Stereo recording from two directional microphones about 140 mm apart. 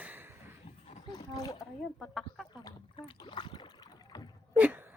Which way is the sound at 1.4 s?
25° left (ahead or behind).